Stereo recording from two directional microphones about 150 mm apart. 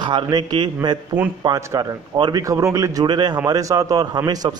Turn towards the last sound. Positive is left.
turn(degrees=-25)  # may be behind; listen again after turning